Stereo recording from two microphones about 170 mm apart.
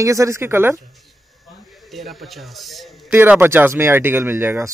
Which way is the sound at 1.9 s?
Centre (ahead or behind).